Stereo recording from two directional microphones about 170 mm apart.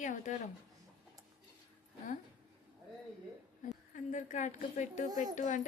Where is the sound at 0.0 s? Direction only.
45° left (ahead or behind).